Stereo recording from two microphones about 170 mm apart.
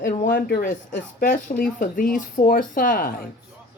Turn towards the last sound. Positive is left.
turn(degrees=55)  # may be behind; listen again after turning